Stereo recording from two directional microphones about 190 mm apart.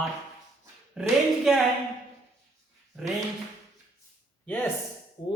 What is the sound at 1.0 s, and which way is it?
Speech, centre (ahead or behind).